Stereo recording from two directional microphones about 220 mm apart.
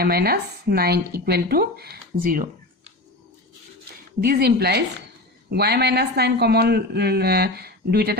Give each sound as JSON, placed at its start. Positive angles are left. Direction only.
{"t": 0.0, "sound": "speech", "side_deg": -45}
{"t": 4.2, "sound": "a man's voice", "side_deg": -45}